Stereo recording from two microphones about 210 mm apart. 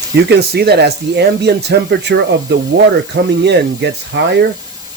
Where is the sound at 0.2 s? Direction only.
50° right (ahead or behind).